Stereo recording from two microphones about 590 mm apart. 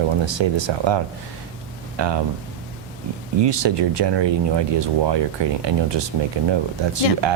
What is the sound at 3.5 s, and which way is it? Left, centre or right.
Speech, right.